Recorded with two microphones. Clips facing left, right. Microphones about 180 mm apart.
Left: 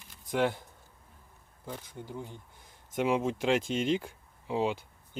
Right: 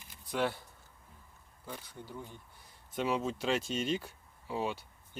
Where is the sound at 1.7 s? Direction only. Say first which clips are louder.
Left 4 dB; 15° left (ahead or behind).